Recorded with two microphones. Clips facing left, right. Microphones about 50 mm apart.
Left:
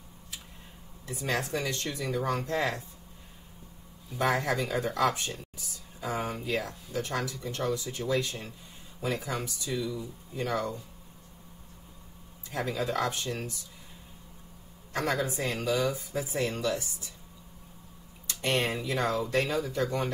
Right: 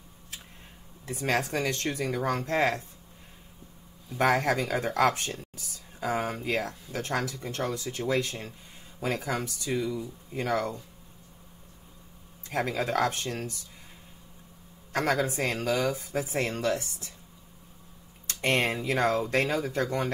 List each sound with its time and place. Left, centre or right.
1.0 s speech: right
4.2 s speech: right
12.4 s speech: right
14.9 s speech: right
18.2 s speech: right